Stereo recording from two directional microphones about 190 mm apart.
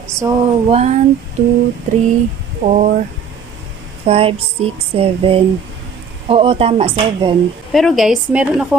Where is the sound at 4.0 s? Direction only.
30° right (ahead or behind).